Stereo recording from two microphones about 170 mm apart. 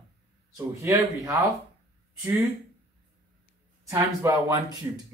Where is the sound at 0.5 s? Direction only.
20° right (ahead or behind).